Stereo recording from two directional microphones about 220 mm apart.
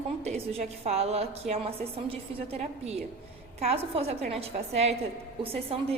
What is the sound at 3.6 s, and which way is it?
A woman's voice, 25° right (ahead or behind).